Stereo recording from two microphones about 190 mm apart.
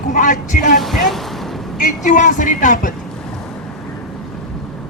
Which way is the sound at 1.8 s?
45° left (ahead or behind).